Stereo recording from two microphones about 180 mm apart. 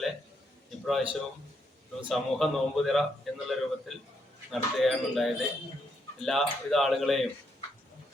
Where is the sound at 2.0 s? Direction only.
Centre (ahead or behind).